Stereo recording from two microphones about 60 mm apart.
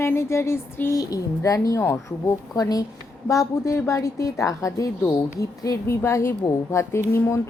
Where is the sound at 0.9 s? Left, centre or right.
Left.